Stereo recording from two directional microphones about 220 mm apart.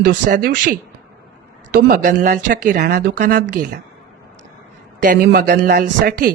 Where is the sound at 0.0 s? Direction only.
35° right (ahead or behind).